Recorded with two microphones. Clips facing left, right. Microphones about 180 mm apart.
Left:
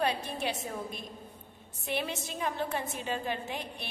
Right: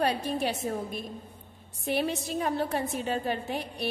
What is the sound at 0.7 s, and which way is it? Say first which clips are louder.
Speech: right 7 dB; 50° right (ahead or behind).